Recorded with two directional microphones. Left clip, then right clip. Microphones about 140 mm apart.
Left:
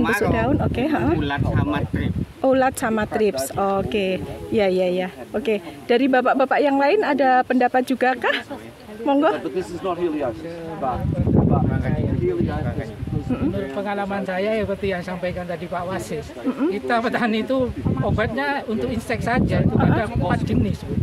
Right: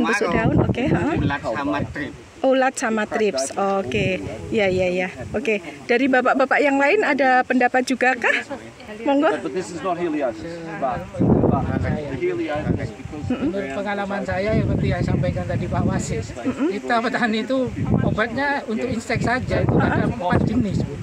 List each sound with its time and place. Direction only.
0.0 s speech: 10° left (ahead or behind)
13.3 s speech: 5° left (ahead or behind)
16.4 s speech: centre (ahead or behind)
16.8 s speech: 15° left (ahead or behind)